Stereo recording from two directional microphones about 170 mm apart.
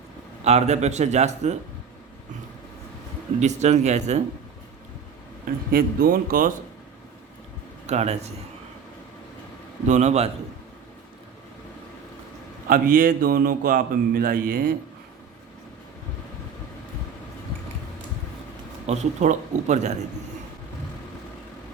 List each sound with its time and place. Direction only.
0.4 s a man's voice: 40° right (ahead or behind)
3.4 s a man's voice: 40° right (ahead or behind)
5.7 s a man's voice: 60° right (ahead or behind)
7.9 s a man's voice: 40° right (ahead or behind)
9.8 s a man's voice: 45° right (ahead or behind)
12.6 s a man's voice: 55° right (ahead or behind)
18.9 s a man's voice: 45° right (ahead or behind)